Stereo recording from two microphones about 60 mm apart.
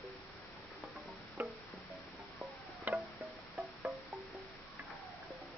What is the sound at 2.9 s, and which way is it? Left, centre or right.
Music, right.